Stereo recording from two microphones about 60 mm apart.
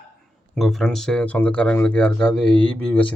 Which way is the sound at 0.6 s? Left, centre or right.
Centre.